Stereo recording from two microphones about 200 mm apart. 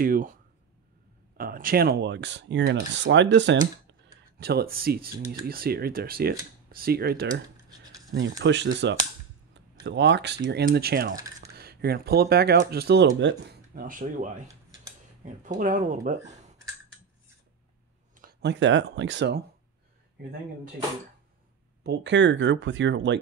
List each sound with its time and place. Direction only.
0.0 s speech: 45° right (ahead or behind)
1.4 s speech: 45° right (ahead or behind); by 3.5 s 65° right (ahead or behind)
4.4 s speech: 50° right (ahead or behind)
8.1 s speech: 65° right (ahead or behind); by 16.2 s 40° right (ahead or behind)
18.4 s speech: 65° right (ahead or behind)
21.8 s speech: 60° right (ahead or behind)